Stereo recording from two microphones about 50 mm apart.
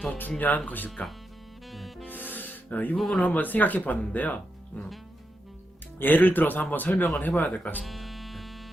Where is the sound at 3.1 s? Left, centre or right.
Left.